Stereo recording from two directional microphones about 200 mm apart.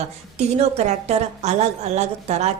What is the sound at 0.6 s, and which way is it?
A woman's voice, 30° right (ahead or behind).